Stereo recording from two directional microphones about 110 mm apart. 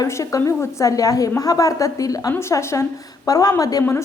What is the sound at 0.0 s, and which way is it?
A woman's voice, 30° left (ahead or behind).